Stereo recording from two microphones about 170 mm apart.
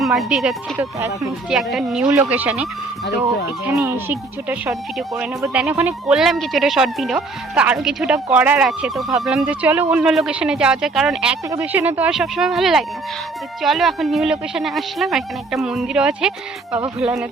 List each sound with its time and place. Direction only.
0.0 s speech: centre (ahead or behind)
0.9 s speech: 15° right (ahead or behind)
1.5 s speech: centre (ahead or behind)
4.4 s speech: 5° right (ahead or behind)